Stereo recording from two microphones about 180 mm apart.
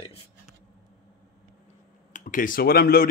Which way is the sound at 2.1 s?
45° left (ahead or behind).